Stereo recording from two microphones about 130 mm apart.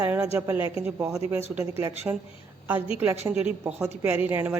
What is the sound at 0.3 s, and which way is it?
A woman's voice, 20° right (ahead or behind).